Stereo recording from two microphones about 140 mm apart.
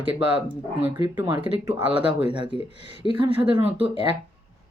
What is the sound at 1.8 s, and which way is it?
Speech, 40° right (ahead or behind).